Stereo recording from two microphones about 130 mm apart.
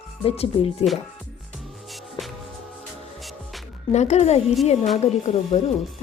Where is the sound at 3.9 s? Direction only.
60° left (ahead or behind).